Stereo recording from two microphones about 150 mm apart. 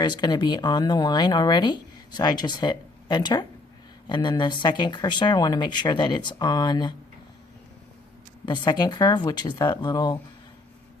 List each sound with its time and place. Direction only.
0.0 s speech: 30° left (ahead or behind)
8.4 s speech: 30° left (ahead or behind)